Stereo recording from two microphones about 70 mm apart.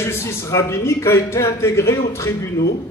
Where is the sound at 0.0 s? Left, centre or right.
Left.